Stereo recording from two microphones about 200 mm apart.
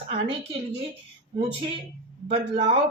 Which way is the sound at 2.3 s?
30° right (ahead or behind).